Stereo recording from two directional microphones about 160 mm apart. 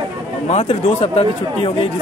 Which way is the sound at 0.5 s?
40° left (ahead or behind).